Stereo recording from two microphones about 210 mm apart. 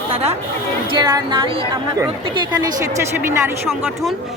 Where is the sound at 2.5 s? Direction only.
15° right (ahead or behind).